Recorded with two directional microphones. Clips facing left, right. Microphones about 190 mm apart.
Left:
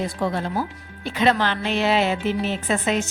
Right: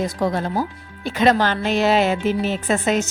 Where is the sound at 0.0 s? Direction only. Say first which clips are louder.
Right 3 dB; 40° right (ahead or behind).